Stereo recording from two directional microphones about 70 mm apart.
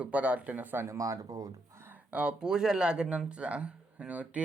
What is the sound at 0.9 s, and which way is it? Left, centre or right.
Speech, right.